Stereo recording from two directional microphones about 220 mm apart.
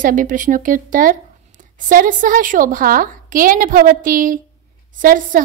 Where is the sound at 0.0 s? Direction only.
35° right (ahead or behind).